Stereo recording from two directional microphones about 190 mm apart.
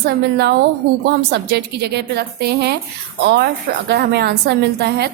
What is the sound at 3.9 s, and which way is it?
A woman's voice, 60° right (ahead or behind).